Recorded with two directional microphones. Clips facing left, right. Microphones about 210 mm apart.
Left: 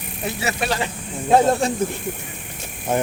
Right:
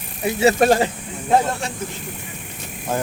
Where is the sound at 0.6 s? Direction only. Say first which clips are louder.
Right 7 dB; 45° right (ahead or behind).